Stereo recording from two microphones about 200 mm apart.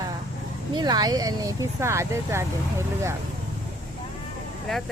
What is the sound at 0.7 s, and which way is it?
Speech, 20° right (ahead or behind).